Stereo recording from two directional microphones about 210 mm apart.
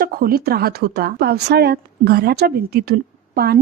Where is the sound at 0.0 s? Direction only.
45° right (ahead or behind).